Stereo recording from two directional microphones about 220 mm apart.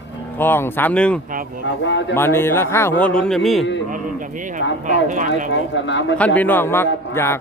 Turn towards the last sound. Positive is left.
turn(degrees=10)  # may be behind; listen again after turning